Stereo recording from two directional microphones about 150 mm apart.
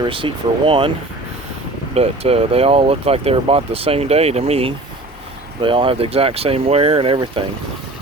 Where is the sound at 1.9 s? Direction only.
45° right (ahead or behind).